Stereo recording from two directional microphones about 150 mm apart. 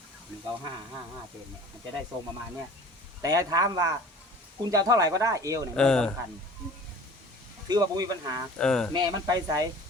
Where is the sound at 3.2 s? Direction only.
25° right (ahead or behind).